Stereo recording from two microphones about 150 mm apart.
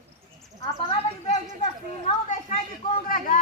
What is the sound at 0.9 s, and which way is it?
Speech, 50° left (ahead or behind).